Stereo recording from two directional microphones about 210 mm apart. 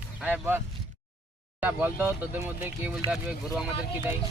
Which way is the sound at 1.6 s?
10° right (ahead or behind).